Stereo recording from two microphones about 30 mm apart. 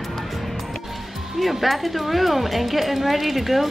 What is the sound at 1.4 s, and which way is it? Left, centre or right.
A woman's voice, centre.